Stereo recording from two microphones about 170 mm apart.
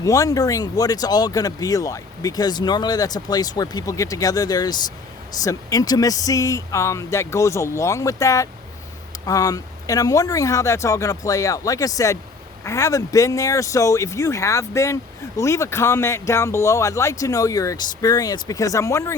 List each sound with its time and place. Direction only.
0.0 s speech: 20° left (ahead or behind)